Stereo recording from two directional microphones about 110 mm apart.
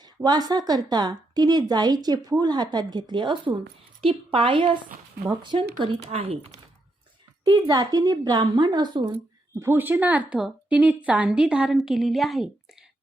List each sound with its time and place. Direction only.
0.0 s a woman's voice: 40° right (ahead or behind); by 6.6 s 65° right (ahead or behind)
7.4 s a woman's voice: 40° right (ahead or behind)
9.6 s a woman's voice: 20° right (ahead or behind); by 12.5 s centre (ahead or behind)